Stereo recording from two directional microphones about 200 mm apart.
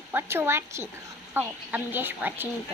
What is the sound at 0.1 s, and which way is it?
Speech, 10° right (ahead or behind).